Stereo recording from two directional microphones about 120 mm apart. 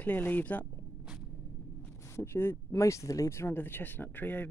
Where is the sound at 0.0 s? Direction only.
15° left (ahead or behind).